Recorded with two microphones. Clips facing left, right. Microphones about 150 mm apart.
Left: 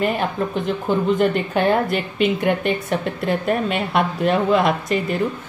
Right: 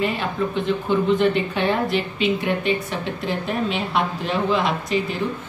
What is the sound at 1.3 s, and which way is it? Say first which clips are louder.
A woman's voice: left 3 dB; 50° left (ahead or behind).